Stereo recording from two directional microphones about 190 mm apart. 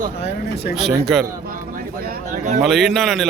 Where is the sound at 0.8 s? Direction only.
Centre (ahead or behind).